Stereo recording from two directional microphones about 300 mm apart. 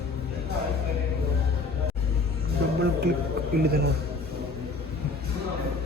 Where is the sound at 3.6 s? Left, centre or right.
Right.